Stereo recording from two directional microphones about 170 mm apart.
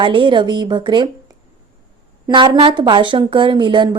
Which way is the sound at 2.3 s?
30° right (ahead or behind).